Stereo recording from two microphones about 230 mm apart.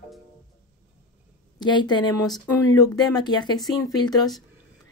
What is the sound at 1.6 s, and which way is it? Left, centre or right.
Speech, centre.